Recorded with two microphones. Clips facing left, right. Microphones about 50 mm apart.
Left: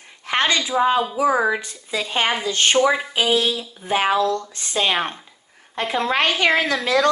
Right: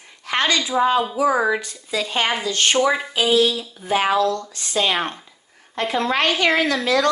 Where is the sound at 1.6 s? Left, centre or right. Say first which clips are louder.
Right 1 dB; left.